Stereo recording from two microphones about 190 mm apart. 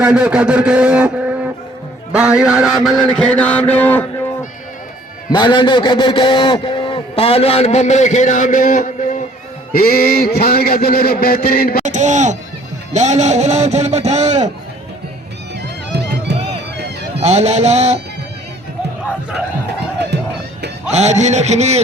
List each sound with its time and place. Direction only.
0.0 s a man's voice: 5° right (ahead or behind)
2.1 s mantra: 5° right (ahead or behind)
5.3 s a man's voice: 25° left (ahead or behind); by 9.2 s 40° left (ahead or behind)
9.7 s music: 50° left (ahead or behind)
11.9 s speech: 40° right (ahead or behind)
16.3 s music: 60° right (ahead or behind)
17.2 s speech: 35° right (ahead or behind)
20.9 s speech: 35° right (ahead or behind)